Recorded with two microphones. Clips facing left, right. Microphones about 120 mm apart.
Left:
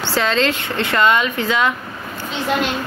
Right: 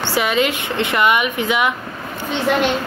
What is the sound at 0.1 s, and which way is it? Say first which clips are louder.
Speech: even; 15° right (ahead or behind).